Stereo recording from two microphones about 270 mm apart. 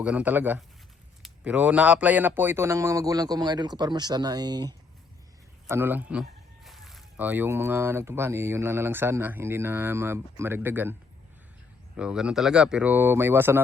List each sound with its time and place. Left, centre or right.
0.0 s speech: centre
11.9 s speech: centre